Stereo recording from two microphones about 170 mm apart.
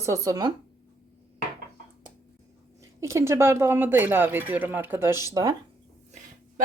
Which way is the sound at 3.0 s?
15° right (ahead or behind).